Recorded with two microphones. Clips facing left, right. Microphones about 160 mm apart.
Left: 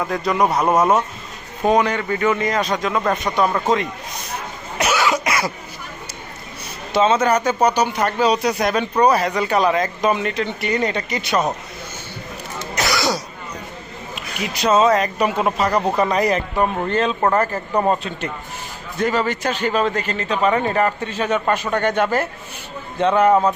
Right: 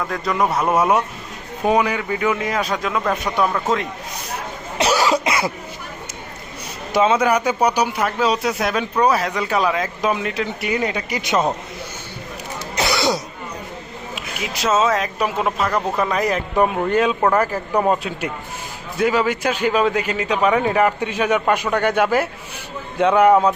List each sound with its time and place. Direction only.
0.1 s a man's voice: centre (ahead or behind)
4.8 s cough: 35° right (ahead or behind)
6.9 s a man's voice: 10° right (ahead or behind)
12.7 s throat clearing: 25° right (ahead or behind)
14.2 s a man's voice: centre (ahead or behind)